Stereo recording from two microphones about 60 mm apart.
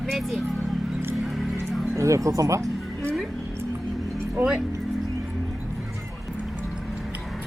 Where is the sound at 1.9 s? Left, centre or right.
Right.